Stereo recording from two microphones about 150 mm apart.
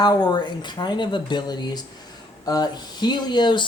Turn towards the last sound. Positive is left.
turn(degrees=30)  # may be behind; listen again after turning